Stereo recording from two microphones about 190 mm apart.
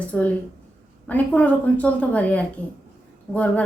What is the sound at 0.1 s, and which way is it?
A woman's voice, 5° left (ahead or behind).